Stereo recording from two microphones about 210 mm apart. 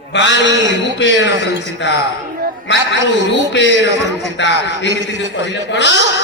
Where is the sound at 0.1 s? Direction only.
55° left (ahead or behind).